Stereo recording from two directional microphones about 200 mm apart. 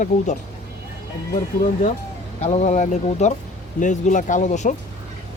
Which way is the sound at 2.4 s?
35° left (ahead or behind).